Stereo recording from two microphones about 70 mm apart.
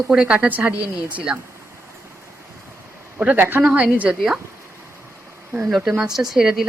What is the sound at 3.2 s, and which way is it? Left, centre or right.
Speech, right.